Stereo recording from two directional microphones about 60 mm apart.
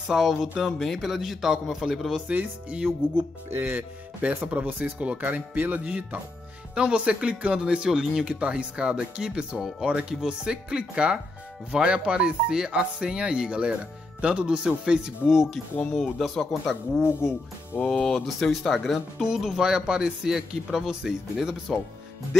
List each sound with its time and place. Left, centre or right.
0.1 s a man's voice: centre
2.2 s speech: right
15.2 s a man's voice: centre
17.8 s speech: centre
18.2 s a man's voice: centre
19.2 s speech: centre